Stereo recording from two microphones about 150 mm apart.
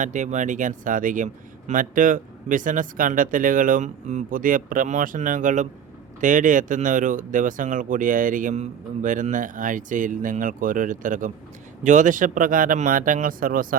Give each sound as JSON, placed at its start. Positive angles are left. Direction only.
{"t": 0.0, "sound": "speech", "side_deg": -55}